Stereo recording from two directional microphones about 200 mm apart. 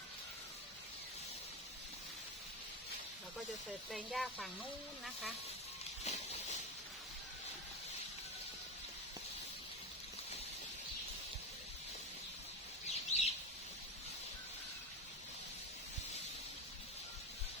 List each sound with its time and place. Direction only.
3.9 s speech: centre (ahead or behind)
6.1 s a sound: 35° left (ahead or behind)
12.9 s bird: 35° left (ahead or behind)